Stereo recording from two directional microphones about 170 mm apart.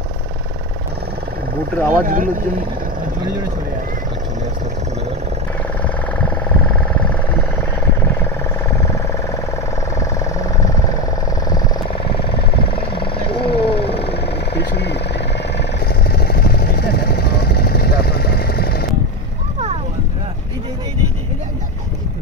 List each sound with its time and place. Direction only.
1.9 s speech: 50° right (ahead or behind)
12.3 s vehicle: 30° left (ahead or behind)
14.0 s vehicle: 75° left (ahead or behind)
15.9 s vehicle: 70° left (ahead or behind)